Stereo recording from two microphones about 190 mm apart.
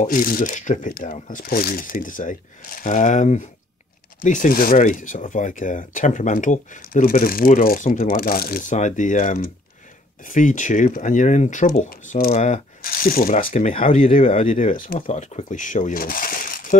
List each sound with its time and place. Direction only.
0.0 s speech: 50° left (ahead or behind)
12.4 s speech: 40° left (ahead or behind)